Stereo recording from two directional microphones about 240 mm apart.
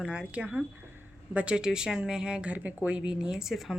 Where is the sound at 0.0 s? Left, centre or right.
Centre.